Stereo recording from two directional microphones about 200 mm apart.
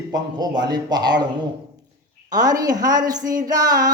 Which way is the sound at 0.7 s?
20° right (ahead or behind).